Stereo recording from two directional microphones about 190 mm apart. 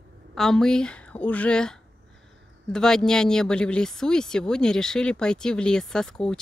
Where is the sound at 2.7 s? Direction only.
5° left (ahead or behind).